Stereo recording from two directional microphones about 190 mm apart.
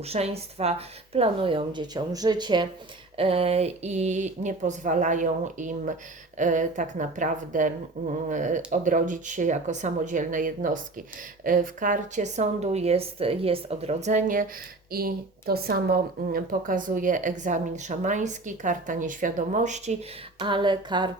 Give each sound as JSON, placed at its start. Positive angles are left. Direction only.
{"t": 0.0, "sound": "a woman's voice", "side_deg": -35}